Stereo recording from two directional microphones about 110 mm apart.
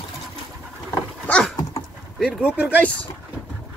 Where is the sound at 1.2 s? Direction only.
10° left (ahead or behind).